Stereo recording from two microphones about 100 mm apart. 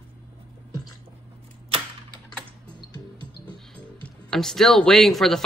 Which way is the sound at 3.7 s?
5° left (ahead or behind).